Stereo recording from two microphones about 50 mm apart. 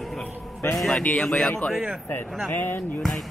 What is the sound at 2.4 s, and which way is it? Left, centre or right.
Speech, left.